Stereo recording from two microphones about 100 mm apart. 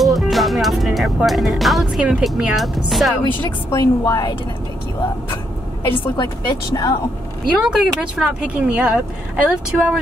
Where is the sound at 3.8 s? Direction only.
40° left (ahead or behind).